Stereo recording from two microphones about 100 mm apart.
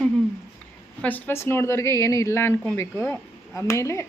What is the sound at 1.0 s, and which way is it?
A woman's voice, 15° left (ahead or behind).